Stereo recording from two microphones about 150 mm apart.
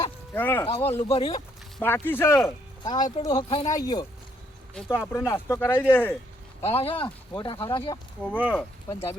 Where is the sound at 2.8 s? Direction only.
30° left (ahead or behind).